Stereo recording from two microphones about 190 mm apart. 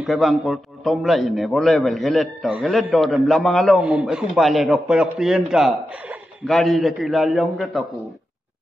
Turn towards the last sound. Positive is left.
turn(degrees=0)  # may be behind; listen again after turning